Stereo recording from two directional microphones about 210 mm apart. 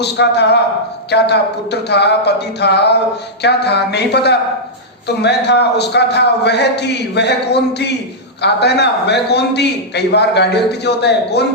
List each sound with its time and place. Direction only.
0.0 s a man's voice: 55° left (ahead or behind)